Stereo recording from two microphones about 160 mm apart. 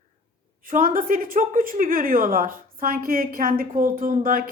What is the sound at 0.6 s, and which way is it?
A woman's voice, 60° right (ahead or behind).